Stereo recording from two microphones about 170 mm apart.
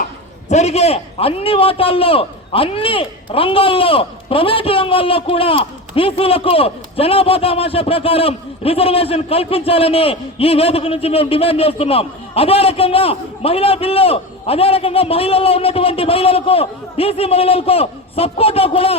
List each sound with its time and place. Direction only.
0.4 s a man's voice: 40° left (ahead or behind)